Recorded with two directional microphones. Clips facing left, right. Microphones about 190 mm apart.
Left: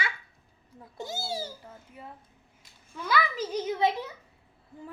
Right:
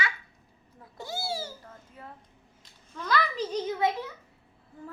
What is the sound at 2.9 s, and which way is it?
Speech, 10° left (ahead or behind).